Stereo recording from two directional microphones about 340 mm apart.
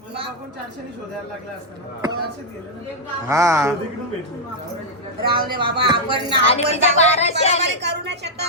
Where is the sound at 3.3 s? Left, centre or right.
Centre.